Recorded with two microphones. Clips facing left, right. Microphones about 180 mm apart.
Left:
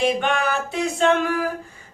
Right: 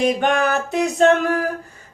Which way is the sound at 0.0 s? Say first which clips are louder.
Right 3 dB; 45° right (ahead or behind).